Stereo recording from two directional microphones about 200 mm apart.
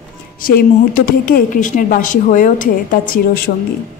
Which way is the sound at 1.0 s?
45° left (ahead or behind).